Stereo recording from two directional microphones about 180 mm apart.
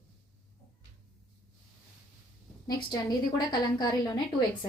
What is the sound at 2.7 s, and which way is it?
A woman's voice, 20° left (ahead or behind).